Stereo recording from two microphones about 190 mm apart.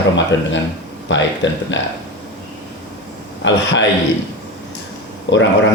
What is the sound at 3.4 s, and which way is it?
Speech, 70° left (ahead or behind).